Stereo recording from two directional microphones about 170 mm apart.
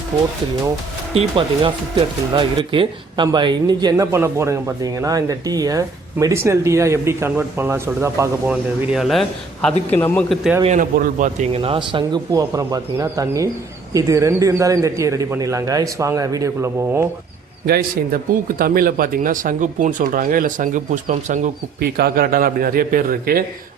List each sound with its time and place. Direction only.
1.1 s speech: 30° right (ahead or behind); by 8.3 s 15° right (ahead or behind)
8.4 s a man's voice: 5° right (ahead or behind)
10.6 s speech: 45° right (ahead or behind)
11.5 s speech: 35° right (ahead or behind); by 17.1 s 15° right (ahead or behind)
18.6 s speech: 60° right (ahead or behind)
21.8 s a man's voice: 65° right (ahead or behind)